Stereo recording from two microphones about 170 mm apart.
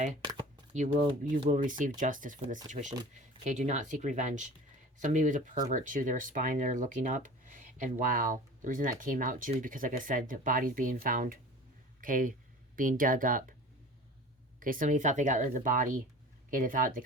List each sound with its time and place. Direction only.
0.3 s a sound: 30° right (ahead or behind)
0.7 s speech: 45° right (ahead or behind)
14.6 s speech: 50° right (ahead or behind)